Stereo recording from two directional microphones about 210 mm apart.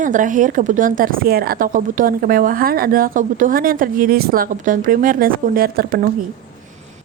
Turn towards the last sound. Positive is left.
turn(degrees=-45)  # may be behind; listen again after turning